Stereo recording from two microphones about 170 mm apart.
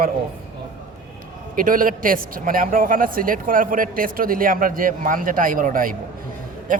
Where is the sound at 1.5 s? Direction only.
55° right (ahead or behind).